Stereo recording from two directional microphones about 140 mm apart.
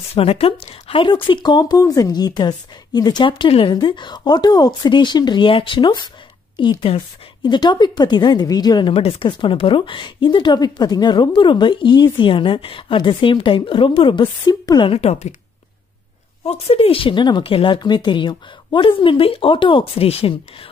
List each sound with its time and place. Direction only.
0.1 s speech: 45° left (ahead or behind); by 8.9 s 30° left (ahead or behind)
8.9 s speech: 40° left (ahead or behind)
14.9 s a woman's voice: 50° left (ahead or behind)
16.4 s speech: 45° left (ahead or behind)